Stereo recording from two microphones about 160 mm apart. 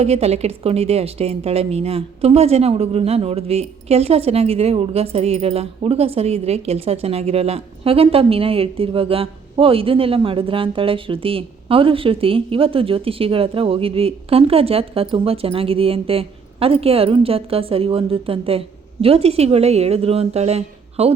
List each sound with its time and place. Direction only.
0.0 s a woman's voice: 40° right (ahead or behind)